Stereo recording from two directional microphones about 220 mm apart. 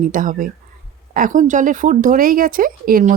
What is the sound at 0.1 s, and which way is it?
Speech, 40° right (ahead or behind).